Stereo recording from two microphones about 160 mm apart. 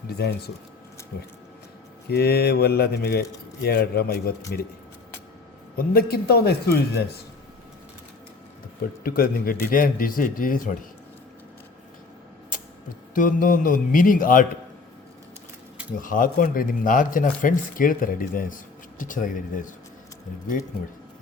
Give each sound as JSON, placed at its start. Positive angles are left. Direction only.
{"t": 0.2, "sound": "speech", "side_deg": 90}
{"t": 2.0, "sound": "speech", "side_deg": 85}
{"t": 5.7, "sound": "speech", "side_deg": 70}
{"t": 8.8, "sound": "speech", "side_deg": 70}
{"t": 13.1, "sound": "speech", "side_deg": 55}
{"t": 16.0, "sound": "speech", "side_deg": 60}